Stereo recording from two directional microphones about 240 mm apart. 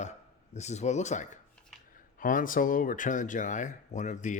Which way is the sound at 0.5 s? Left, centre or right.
Left.